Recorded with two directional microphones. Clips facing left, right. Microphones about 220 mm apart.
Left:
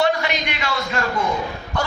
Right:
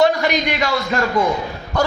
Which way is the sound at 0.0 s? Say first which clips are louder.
Right 5 dB; 40° right (ahead or behind).